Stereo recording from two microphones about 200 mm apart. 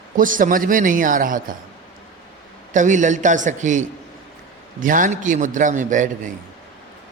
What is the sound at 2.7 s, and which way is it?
A man's voice, 40° right (ahead or behind).